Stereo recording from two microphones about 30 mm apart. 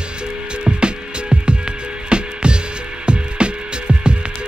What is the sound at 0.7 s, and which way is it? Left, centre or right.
Music, right.